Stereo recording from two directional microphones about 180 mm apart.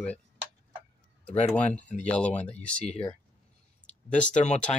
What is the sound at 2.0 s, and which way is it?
Speech, 5° left (ahead or behind).